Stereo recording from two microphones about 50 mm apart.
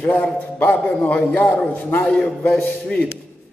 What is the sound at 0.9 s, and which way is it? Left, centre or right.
Speech, left.